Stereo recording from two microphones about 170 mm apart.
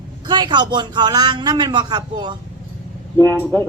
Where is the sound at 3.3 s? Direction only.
15° left (ahead or behind).